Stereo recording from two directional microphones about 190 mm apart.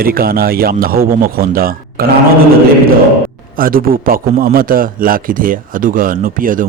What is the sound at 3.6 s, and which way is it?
A man's voice, 50° right (ahead or behind).